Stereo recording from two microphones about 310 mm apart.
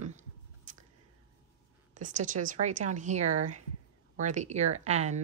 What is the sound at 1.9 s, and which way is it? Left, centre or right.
A woman's voice, right.